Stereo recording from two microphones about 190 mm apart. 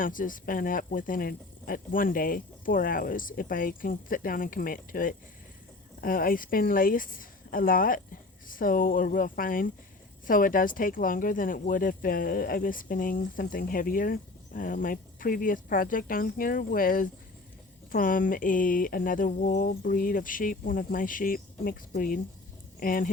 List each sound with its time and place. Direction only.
0.0 s speech: 45° left (ahead or behind)